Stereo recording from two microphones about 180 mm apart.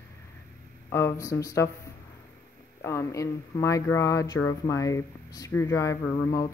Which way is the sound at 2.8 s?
15° left (ahead or behind).